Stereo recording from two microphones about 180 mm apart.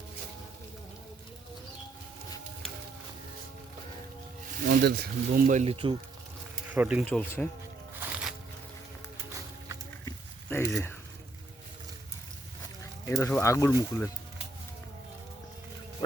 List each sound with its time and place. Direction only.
4.6 s speech: 55° right (ahead or behind); by 6.0 s 30° right (ahead or behind)
6.7 s speech: 5° right (ahead or behind)
7.0 s speech: 10° left (ahead or behind)
7.9 s music: 10° right (ahead or behind)
10.1 s a sound: 15° left (ahead or behind)
13.1 s speech: 15° left (ahead or behind)